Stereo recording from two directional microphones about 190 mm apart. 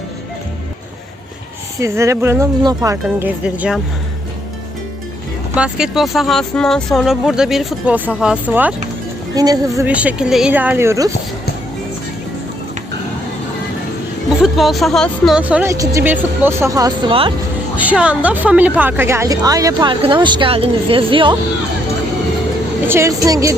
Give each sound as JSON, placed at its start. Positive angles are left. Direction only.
{"t": 1.8, "sound": "speech", "side_deg": -15}
{"t": 5.5, "sound": "speech", "side_deg": -5}
{"t": 9.3, "sound": "a woman's voice", "side_deg": -20}
{"t": 9.8, "sound": "speech", "side_deg": -5}
{"t": 14.4, "sound": "speech", "side_deg": 0}
{"t": 17.7, "sound": "speech", "side_deg": -5}
{"t": 22.9, "sound": "speech", "side_deg": -15}